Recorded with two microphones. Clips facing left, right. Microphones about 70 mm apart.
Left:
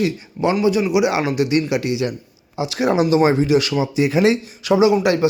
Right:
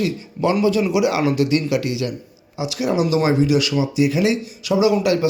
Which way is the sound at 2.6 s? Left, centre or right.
Left.